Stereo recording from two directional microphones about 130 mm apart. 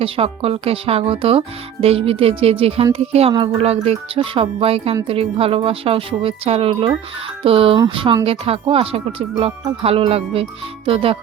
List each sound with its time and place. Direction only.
0.0 s speech: 45° right (ahead or behind)